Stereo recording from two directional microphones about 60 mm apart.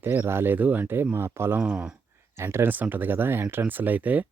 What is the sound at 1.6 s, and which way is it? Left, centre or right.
Speech, centre.